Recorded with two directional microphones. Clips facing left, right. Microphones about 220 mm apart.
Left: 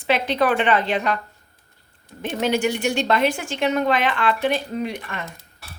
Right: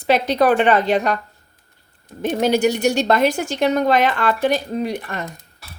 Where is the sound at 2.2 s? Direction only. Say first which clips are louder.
Right 5 dB; 40° right (ahead or behind).